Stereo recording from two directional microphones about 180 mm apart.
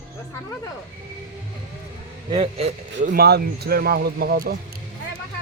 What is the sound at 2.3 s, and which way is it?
Speech, 35° right (ahead or behind).